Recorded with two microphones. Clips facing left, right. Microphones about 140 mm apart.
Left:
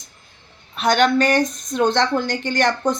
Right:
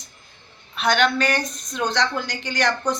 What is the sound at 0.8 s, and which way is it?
A woman's voice, 45° left (ahead or behind).